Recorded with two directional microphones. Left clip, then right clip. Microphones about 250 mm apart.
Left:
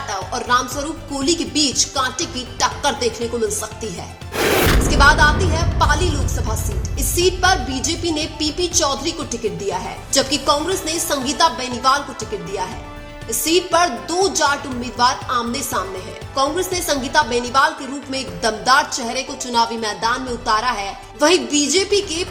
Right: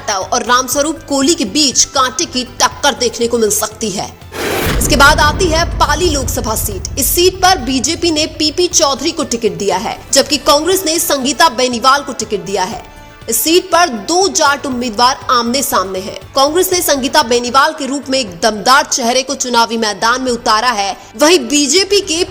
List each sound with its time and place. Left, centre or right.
0.1 s speech: right
4.4 s music: centre
4.9 s speech: right